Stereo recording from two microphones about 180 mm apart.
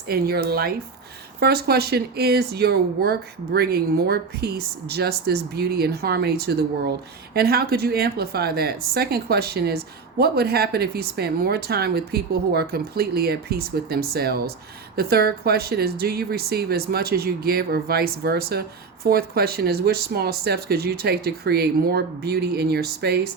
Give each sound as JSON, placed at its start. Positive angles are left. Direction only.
{"t": 0.1, "sound": "a woman's voice", "side_deg": -60}